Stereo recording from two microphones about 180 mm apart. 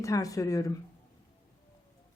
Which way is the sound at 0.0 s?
20° left (ahead or behind).